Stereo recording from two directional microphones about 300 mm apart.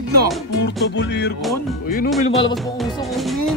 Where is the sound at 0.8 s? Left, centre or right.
Left.